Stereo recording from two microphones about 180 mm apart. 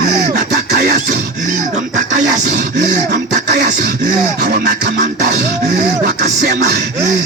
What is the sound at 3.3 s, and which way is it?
Music, 65° right (ahead or behind).